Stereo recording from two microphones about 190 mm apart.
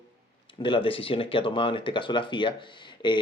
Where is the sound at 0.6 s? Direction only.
25° left (ahead or behind).